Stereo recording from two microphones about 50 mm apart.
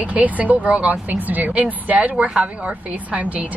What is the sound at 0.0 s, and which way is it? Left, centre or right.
A woman's voice, right.